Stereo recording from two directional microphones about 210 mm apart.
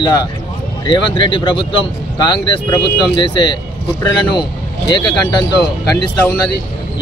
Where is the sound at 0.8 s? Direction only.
25° left (ahead or behind).